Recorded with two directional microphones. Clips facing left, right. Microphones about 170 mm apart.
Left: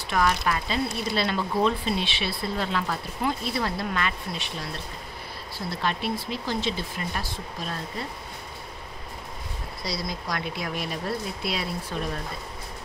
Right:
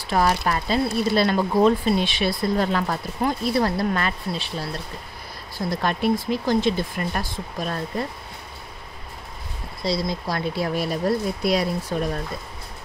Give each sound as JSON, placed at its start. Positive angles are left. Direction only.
{"t": 0.1, "sound": "speech", "side_deg": -35}
{"t": 5.7, "sound": "speech", "side_deg": -45}
{"t": 9.8, "sound": "speech", "side_deg": -25}